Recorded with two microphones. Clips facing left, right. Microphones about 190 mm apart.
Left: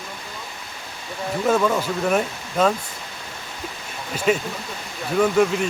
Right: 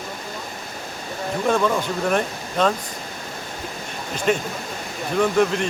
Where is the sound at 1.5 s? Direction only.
5° left (ahead or behind).